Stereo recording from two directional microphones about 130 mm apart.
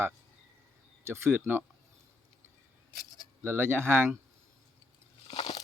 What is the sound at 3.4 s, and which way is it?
Speech, 15° right (ahead or behind).